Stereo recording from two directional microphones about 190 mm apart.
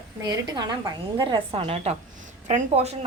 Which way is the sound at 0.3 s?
20° right (ahead or behind).